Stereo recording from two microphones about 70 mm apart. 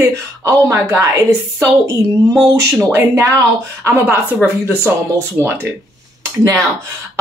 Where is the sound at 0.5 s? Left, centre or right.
Right.